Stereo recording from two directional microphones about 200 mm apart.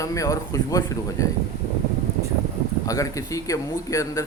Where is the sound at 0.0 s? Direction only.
15° left (ahead or behind).